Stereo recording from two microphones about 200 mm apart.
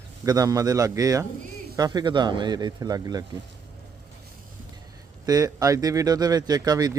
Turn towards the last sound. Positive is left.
turn(degrees=-20)  # may be behind; listen again after turning